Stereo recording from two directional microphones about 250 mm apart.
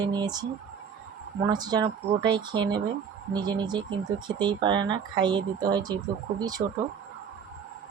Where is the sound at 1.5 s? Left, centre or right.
Centre.